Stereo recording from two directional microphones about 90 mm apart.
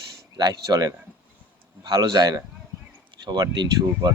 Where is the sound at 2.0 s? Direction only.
50° right (ahead or behind).